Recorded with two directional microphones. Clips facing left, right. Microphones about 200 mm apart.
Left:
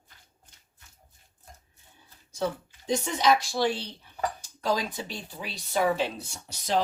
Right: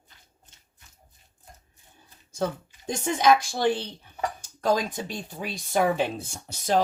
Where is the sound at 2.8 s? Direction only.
50° right (ahead or behind).